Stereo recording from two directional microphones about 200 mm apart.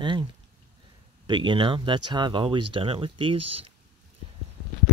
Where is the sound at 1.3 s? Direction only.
25° right (ahead or behind).